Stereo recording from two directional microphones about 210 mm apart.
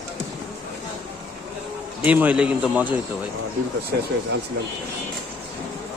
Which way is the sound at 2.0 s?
5° right (ahead or behind).